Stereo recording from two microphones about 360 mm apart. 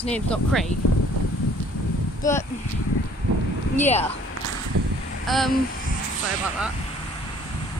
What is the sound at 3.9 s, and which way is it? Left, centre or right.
Speech, centre.